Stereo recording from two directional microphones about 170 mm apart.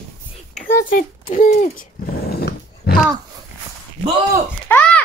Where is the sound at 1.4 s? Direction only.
55° left (ahead or behind).